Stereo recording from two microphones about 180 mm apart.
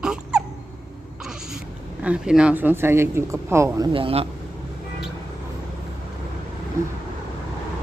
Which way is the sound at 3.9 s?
30° right (ahead or behind).